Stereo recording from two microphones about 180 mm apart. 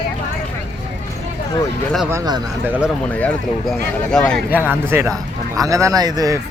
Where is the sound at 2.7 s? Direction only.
5° right (ahead or behind).